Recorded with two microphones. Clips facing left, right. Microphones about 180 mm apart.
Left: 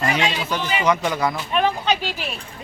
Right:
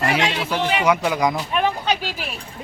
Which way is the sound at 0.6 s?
70° right (ahead or behind).